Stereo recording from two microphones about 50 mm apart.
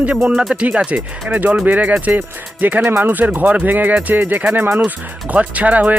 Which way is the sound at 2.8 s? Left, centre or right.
Right.